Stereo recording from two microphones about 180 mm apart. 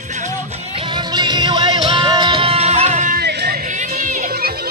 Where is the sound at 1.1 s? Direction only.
25° right (ahead or behind); by 3.2 s 45° right (ahead or behind).